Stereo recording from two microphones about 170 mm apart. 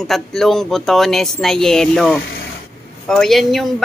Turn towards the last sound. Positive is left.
turn(degrees=0)  # may be behind; listen again after turning